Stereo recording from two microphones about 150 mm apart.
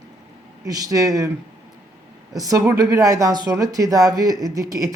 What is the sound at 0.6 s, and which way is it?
Speech, 25° right (ahead or behind).